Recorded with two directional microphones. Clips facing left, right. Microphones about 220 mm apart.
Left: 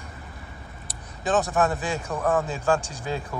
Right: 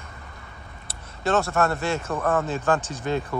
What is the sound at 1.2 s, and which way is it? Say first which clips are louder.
Speech: even; 15° left (ahead or behind).